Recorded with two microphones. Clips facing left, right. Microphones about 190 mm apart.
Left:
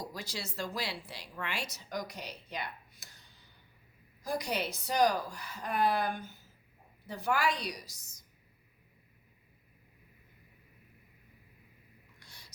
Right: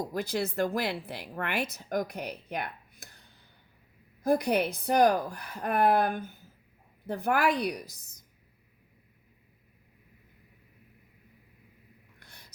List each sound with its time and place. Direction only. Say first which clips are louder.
0.0 s speech: right 11 dB; 55° right (ahead or behind)
4.2 s speech: right 9 dB; 55° right (ahead or behind)
12.2 s a sound: right 2 dB; 60° right (ahead or behind)